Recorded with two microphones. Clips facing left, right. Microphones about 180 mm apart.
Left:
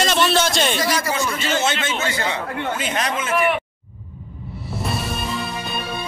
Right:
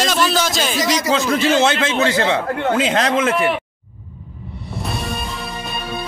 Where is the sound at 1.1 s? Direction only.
70° right (ahead or behind); by 3.2 s 90° right.